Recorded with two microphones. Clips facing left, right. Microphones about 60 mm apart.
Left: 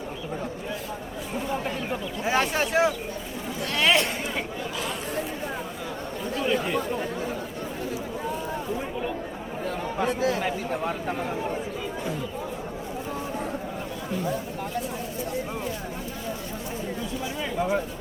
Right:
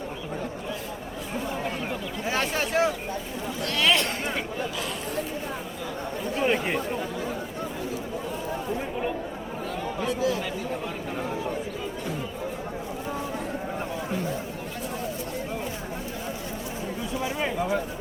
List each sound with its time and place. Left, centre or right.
1.9 s speech: centre
3.8 s speech: centre
6.3 s chatter: right
10.0 s speech: left
17.6 s speech: centre